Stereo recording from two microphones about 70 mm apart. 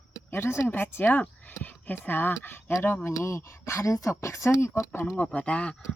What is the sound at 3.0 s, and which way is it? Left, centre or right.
Speech, left.